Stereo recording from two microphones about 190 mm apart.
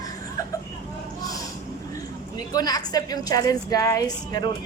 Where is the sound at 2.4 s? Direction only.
20° left (ahead or behind).